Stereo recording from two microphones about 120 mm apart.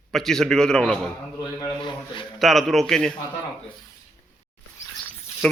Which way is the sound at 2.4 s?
Centre (ahead or behind).